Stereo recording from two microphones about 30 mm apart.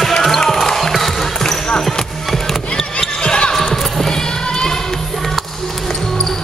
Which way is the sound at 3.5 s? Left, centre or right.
Centre.